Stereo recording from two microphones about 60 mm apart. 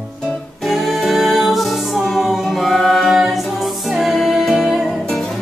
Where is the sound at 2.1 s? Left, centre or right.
Centre.